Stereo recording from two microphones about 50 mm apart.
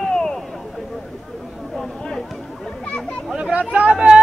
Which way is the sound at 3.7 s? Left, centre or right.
Right.